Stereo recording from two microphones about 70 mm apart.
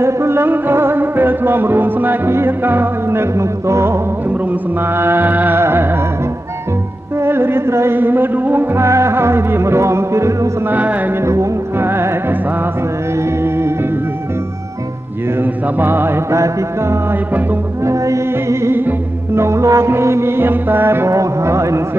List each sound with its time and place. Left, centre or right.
0.0 s music: right
7.2 s music: right
8.8 s music: right
10.7 s music: right
11.2 s music: right
13.4 s music: right
15.4 s music: right
21.1 s speech: right